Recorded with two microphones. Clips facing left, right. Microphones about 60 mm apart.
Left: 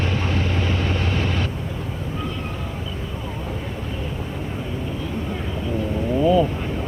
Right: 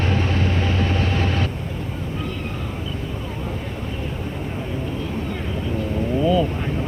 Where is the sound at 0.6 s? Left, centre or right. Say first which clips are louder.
Right 2 dB; right.